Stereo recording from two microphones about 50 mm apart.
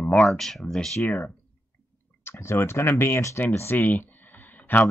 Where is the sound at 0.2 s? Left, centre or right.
Centre.